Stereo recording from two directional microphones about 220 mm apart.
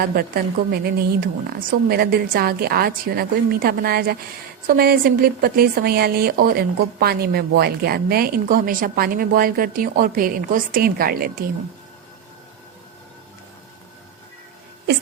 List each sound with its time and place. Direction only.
0.1 s a woman's voice: 45° right (ahead or behind)